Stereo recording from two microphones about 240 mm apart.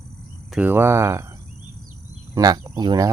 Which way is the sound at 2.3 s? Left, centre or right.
Centre.